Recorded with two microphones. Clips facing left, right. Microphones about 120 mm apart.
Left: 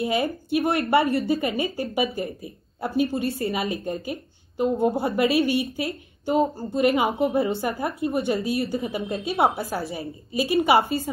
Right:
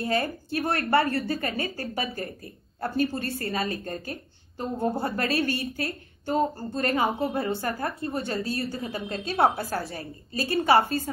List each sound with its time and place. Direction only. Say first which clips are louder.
0.0 s a woman's voice: left 3 dB; 15° left (ahead or behind)